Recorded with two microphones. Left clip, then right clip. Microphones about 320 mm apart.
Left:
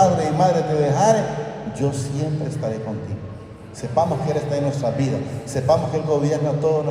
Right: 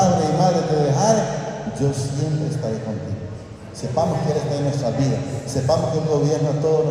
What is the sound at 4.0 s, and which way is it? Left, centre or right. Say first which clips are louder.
A man's voice: left 1 dB; left.